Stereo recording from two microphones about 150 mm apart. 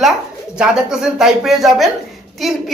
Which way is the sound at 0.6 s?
5° right (ahead or behind).